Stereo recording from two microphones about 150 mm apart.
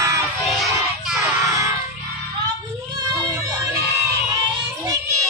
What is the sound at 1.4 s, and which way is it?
Music, 20° right (ahead or behind).